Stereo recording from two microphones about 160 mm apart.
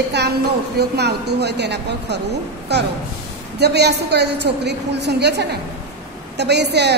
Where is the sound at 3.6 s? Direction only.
90° right.